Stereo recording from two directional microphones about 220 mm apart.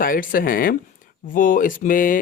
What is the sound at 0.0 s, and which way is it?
Speech, 40° left (ahead or behind).